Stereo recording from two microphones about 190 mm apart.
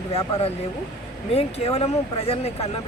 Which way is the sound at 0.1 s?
30° left (ahead or behind).